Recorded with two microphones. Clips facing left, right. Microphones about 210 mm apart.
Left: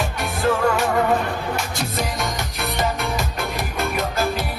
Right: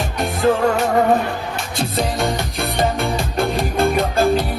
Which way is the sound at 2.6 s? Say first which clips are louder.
Right 3 dB; 30° right (ahead or behind).